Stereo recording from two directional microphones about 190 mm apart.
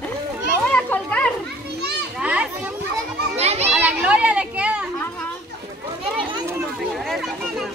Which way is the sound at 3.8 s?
5° right (ahead or behind).